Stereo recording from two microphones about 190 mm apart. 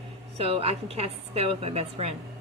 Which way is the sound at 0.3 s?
30° right (ahead or behind).